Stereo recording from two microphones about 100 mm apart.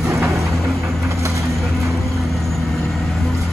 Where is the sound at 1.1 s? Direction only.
30° right (ahead or behind).